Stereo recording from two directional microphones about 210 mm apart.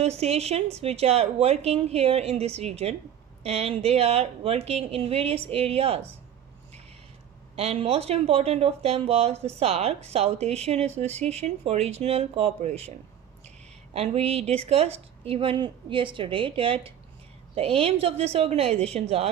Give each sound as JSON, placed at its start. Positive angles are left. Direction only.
{"t": 0.0, "sound": "a woman's voice", "side_deg": -30}
{"t": 7.5, "sound": "a woman's voice", "side_deg": -30}
{"t": 13.9, "sound": "a woman's voice", "side_deg": -30}